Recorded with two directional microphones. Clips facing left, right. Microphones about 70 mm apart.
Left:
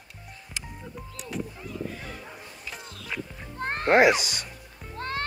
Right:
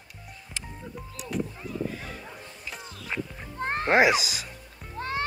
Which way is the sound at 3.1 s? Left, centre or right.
Right.